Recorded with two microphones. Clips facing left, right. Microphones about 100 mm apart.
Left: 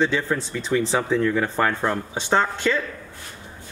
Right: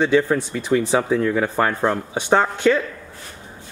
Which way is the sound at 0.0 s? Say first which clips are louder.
Right 5 dB; 15° right (ahead or behind).